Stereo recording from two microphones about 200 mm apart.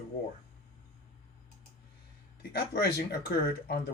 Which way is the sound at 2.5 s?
50° left (ahead or behind).